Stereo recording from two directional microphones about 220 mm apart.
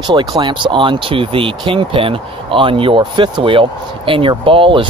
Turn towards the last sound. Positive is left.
turn(degrees=-25)  # may be behind; listen again after turning